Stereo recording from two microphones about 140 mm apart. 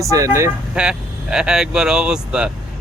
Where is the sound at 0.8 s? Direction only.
5° right (ahead or behind).